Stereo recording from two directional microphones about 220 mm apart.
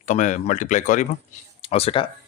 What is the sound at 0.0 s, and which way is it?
Speech, 35° left (ahead or behind).